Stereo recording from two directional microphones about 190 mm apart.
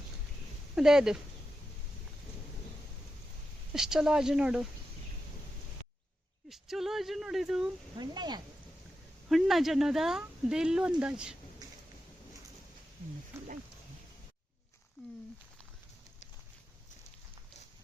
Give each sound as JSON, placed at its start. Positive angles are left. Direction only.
{"t": 0.8, "sound": "speech", "side_deg": -5}
{"t": 3.7, "sound": "speech", "side_deg": -5}
{"t": 6.5, "sound": "speech", "side_deg": 0}
{"t": 7.9, "sound": "speech", "side_deg": -20}
{"t": 9.3, "sound": "speech", "side_deg": 0}